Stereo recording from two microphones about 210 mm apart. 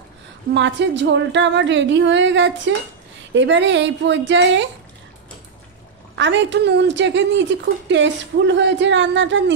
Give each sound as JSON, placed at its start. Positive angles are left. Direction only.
{"t": 0.6, "sound": "a woman's voice", "side_deg": -60}
{"t": 6.1, "sound": "a woman's voice", "side_deg": -60}